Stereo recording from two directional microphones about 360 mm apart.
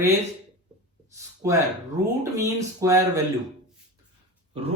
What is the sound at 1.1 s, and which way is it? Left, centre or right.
Speech, centre.